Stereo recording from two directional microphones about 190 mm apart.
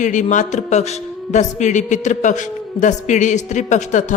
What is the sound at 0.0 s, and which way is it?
A woman's voice, 40° left (ahead or behind).